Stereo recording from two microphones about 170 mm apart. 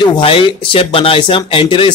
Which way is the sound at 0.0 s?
30° left (ahead or behind).